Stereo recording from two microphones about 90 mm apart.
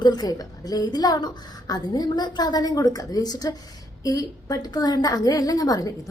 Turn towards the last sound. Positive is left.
turn(degrees=45)  # may be behind; listen again after turning